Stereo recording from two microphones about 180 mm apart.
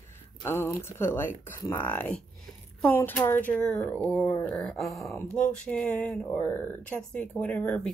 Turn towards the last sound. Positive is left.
turn(degrees=10)  # may be behind; listen again after turning